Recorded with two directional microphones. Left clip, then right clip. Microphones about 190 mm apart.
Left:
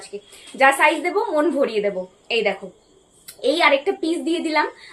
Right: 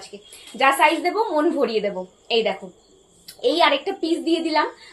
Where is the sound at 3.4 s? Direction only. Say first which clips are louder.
Left 1 dB; 20° left (ahead or behind).